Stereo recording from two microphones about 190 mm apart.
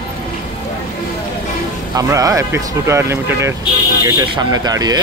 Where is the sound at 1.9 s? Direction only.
20° right (ahead or behind).